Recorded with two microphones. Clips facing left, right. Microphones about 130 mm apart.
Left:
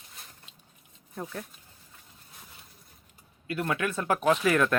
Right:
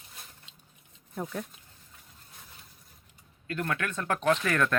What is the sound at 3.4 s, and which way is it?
Speech, 10° left (ahead or behind).